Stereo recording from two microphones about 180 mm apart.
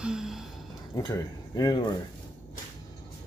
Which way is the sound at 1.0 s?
20° left (ahead or behind).